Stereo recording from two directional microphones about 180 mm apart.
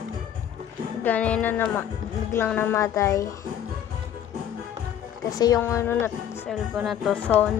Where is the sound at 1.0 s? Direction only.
10° left (ahead or behind).